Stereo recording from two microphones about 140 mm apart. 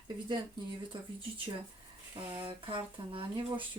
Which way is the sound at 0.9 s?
35° right (ahead or behind).